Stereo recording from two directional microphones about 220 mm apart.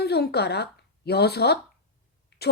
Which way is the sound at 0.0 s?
45° left (ahead or behind).